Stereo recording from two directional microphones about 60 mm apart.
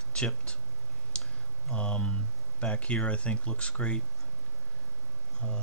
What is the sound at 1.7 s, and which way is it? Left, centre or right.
Speech, centre.